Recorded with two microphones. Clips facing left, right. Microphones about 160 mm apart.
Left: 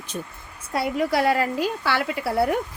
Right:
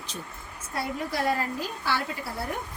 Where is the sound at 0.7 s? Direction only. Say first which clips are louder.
Left 8 dB; 85° left.